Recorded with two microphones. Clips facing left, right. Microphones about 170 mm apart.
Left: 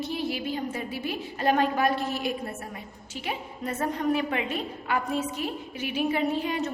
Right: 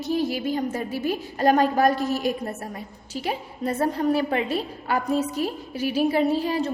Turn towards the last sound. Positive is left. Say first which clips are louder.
# right 4 dB
turn(degrees=-35)  # may be behind; listen again after turning